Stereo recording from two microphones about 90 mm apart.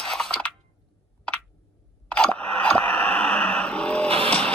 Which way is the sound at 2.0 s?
15° left (ahead or behind).